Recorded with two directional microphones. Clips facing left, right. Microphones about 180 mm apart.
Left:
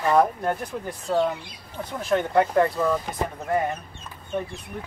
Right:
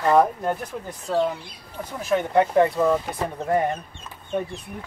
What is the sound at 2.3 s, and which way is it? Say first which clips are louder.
Speech: right 3 dB; 20° right (ahead or behind).